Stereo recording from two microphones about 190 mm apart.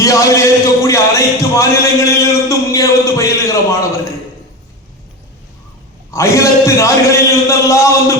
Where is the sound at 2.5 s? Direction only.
15° left (ahead or behind).